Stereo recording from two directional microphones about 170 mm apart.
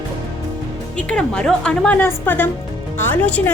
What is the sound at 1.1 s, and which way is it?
A woman's voice, 5° left (ahead or behind).